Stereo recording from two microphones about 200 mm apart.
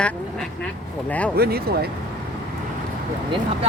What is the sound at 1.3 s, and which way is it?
Speech, 50° right (ahead or behind).